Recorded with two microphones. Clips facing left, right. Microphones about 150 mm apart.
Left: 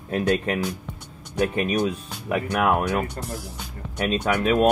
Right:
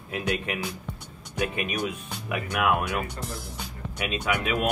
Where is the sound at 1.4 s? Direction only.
35° left (ahead or behind).